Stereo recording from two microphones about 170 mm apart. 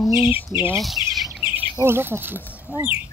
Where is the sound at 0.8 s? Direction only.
Centre (ahead or behind).